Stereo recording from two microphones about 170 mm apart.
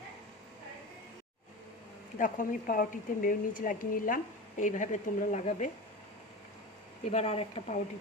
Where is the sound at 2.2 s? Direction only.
55° left (ahead or behind).